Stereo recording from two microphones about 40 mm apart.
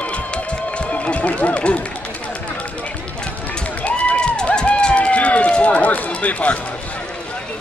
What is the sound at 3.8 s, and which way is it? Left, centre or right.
Run, left.